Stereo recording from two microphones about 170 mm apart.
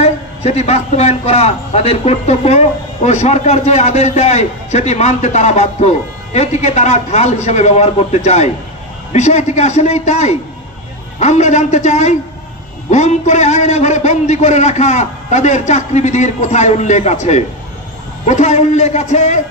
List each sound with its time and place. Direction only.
0.0 s a man's voice: 40° left (ahead or behind)